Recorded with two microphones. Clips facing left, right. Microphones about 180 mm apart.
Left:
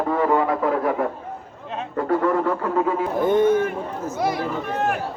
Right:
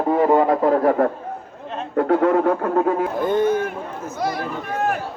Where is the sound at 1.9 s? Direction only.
65° right (ahead or behind).